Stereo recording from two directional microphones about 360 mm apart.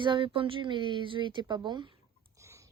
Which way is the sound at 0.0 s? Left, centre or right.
Centre.